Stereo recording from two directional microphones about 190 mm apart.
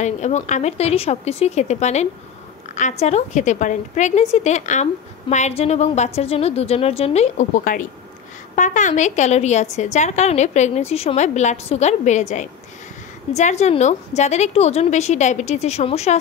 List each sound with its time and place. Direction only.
0.0 s a woman's voice: 40° left (ahead or behind)